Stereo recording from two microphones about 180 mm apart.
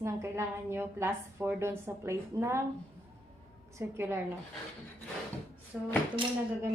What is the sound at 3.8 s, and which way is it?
Speech, 15° right (ahead or behind).